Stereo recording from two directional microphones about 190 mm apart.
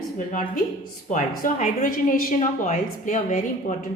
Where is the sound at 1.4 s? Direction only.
45° left (ahead or behind).